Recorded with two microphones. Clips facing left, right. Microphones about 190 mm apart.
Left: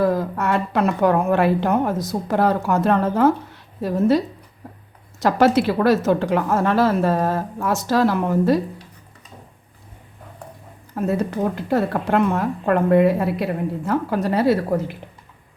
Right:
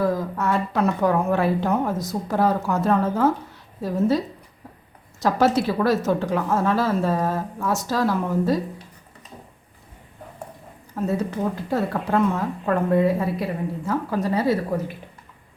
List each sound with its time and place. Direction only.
0.0 s a woman's voice: 65° left (ahead or behind)
5.2 s speech: 75° left (ahead or behind)
10.9 s speech: 65° left (ahead or behind)